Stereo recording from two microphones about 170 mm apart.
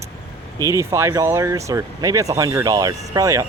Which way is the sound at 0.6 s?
15° right (ahead or behind).